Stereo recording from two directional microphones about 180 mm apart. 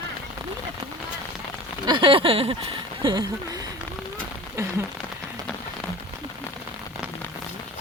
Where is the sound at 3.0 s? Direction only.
25° right (ahead or behind).